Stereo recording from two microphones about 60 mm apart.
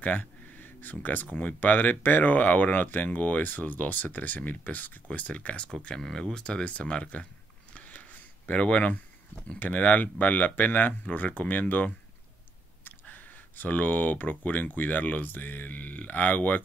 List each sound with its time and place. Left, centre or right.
0.0 s speech: left
5.9 s speech: centre
7.7 s a sound: left
8.5 s speech: left